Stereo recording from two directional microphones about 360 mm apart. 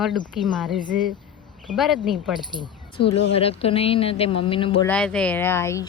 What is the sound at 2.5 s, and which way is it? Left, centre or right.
A woman's voice, centre.